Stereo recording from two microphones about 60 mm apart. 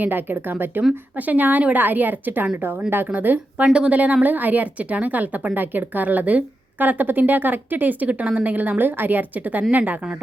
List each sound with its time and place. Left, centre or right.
0.0 s a woman's voice: right